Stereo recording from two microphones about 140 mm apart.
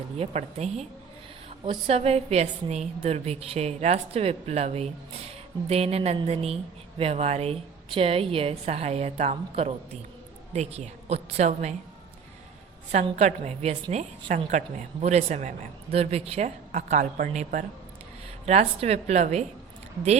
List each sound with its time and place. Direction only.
0.2 s a woman's voice: 50° right (ahead or behind)
12.9 s a woman's voice: 55° right (ahead or behind)
18.4 s a woman's voice: 50° right (ahead or behind)